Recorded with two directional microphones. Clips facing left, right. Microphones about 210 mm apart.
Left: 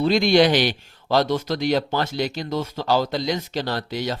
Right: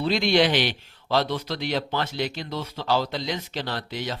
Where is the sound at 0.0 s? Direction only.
40° left (ahead or behind).